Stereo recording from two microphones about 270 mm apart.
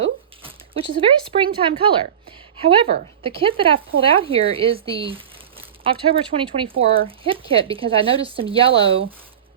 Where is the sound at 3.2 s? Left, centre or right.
Centre.